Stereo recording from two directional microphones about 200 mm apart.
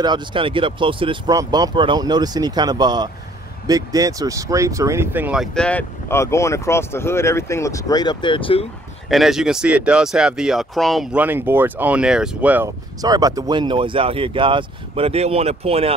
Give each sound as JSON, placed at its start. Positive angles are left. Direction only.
{"t": 0.0, "sound": "speech", "side_deg": -25}
{"t": 9.1, "sound": "speech", "side_deg": 0}